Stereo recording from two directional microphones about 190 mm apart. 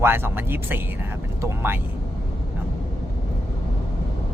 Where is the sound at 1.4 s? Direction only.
15° right (ahead or behind).